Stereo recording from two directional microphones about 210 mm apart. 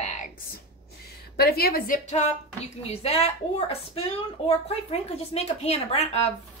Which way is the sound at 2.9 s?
30° left (ahead or behind).